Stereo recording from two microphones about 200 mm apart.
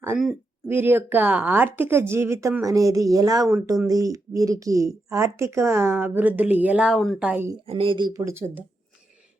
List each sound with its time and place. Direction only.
0.7 s speech: 10° right (ahead or behind)
7.7 s speech: 25° right (ahead or behind); by 8.6 s 10° right (ahead or behind)